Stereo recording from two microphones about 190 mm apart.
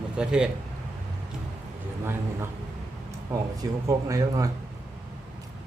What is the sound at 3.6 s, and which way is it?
Speech, 15° right (ahead or behind).